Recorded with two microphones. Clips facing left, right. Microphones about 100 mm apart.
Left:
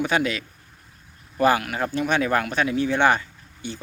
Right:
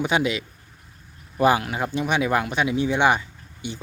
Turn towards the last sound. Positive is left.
turn(degrees=-15)  # may be behind; listen again after turning